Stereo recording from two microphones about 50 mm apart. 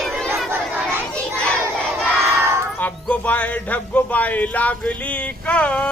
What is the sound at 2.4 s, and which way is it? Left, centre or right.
Music, right.